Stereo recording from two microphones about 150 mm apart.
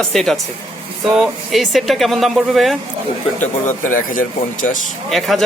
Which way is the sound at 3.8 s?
65° left (ahead or behind).